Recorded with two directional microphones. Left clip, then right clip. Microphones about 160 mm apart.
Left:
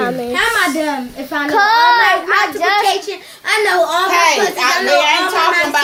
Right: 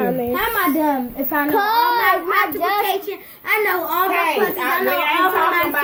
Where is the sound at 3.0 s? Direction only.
35° right (ahead or behind).